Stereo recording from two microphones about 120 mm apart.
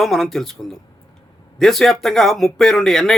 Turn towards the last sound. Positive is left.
turn(degrees=5)  # may be behind; listen again after turning